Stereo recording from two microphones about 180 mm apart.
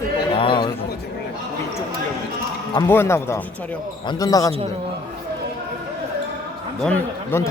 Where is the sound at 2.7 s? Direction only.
15° left (ahead or behind).